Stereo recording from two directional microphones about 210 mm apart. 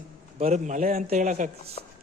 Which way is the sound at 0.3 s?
35° right (ahead or behind).